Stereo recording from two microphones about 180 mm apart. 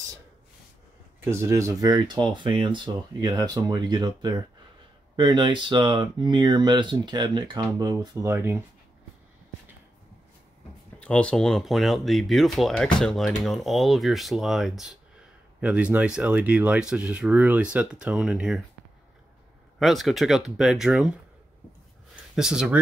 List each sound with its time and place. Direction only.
1.2 s speech: 15° right (ahead or behind)
11.0 s speech: 5° left (ahead or behind)
19.8 s speech: centre (ahead or behind)
22.1 s a sound: 5° right (ahead or behind)